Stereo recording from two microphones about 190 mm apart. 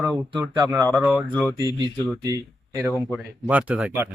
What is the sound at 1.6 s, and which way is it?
Speech, 20° right (ahead or behind).